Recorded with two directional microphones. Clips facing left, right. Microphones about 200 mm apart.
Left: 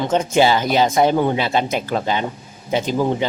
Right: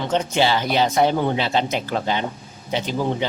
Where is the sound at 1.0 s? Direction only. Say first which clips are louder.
Left 3 dB; 15° left (ahead or behind).